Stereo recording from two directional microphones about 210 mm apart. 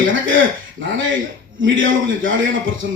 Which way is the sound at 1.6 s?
65° right (ahead or behind).